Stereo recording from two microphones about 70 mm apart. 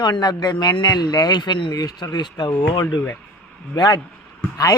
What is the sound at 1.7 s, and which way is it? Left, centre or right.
Speech, left.